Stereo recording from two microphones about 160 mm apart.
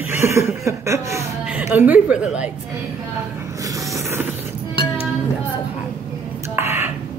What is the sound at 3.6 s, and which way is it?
Music, 20° right (ahead or behind).